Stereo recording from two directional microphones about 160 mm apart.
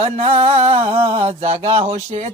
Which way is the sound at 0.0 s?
40° right (ahead or behind).